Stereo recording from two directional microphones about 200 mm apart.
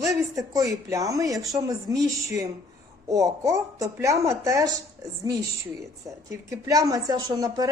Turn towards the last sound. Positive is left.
turn(degrees=-20)  # may be behind; listen again after turning